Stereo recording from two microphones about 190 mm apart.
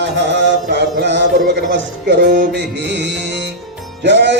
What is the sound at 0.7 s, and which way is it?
Music, 65° right (ahead or behind).